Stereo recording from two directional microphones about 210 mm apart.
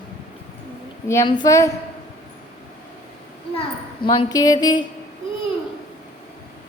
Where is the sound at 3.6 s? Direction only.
25° left (ahead or behind).